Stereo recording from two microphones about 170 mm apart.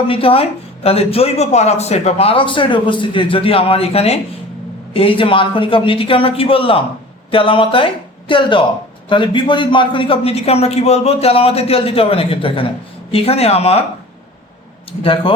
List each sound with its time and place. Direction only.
0.1 s a man's voice: 35° left (ahead or behind)
15.0 s a man's voice: 30° left (ahead or behind)